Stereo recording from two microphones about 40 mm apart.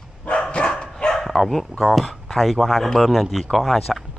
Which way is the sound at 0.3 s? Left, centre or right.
Left.